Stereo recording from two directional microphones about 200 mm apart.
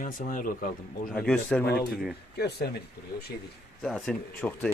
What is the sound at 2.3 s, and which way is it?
Speech, 55° left (ahead or behind).